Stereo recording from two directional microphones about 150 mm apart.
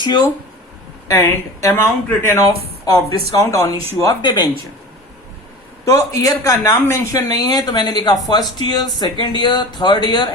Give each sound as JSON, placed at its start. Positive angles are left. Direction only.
{"t": 0.0, "sound": "speech", "side_deg": 30}
{"t": 5.8, "sound": "speech", "side_deg": 20}